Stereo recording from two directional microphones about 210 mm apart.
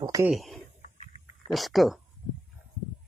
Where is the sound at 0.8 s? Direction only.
35° left (ahead or behind).